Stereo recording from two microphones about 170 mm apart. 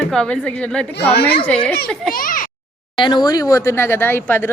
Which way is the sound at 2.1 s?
55° left (ahead or behind).